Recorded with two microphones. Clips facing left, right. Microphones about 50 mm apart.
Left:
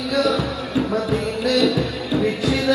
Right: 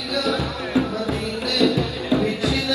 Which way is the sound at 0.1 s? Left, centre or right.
Left.